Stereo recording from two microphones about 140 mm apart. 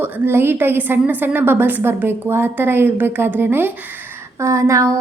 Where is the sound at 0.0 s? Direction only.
15° right (ahead or behind).